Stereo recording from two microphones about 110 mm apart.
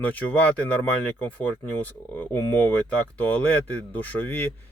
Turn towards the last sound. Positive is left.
turn(degrees=20)  # may be behind; listen again after turning